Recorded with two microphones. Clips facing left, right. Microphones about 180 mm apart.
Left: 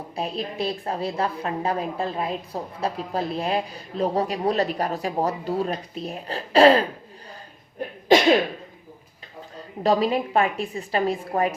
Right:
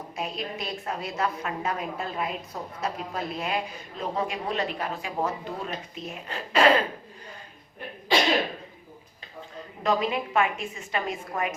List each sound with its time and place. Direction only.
0.2 s a woman's voice: 35° left (ahead or behind)
9.8 s a woman's voice: 35° left (ahead or behind)